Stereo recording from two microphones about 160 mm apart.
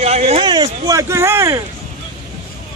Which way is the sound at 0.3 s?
30° right (ahead or behind).